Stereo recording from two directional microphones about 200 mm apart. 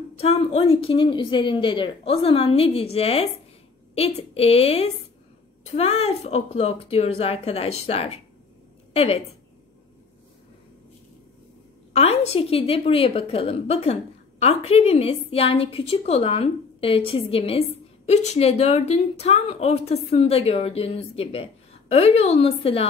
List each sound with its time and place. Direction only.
0.2 s a woman's voice: 30° left (ahead or behind)
11.9 s a woman's voice: 30° left (ahead or behind)